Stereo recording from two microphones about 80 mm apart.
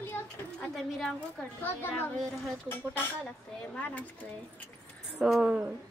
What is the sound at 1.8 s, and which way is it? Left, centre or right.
Speech, left.